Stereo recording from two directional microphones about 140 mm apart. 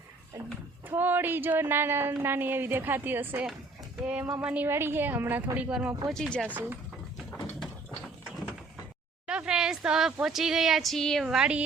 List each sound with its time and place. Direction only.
0.9 s a woman's voice: 15° right (ahead or behind)
6.1 s speech: centre (ahead or behind)
6.5 s a woman's voice: 15° right (ahead or behind)
9.2 s speech: 5° right (ahead or behind)